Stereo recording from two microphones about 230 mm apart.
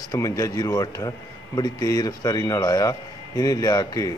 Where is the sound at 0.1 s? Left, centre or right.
Centre.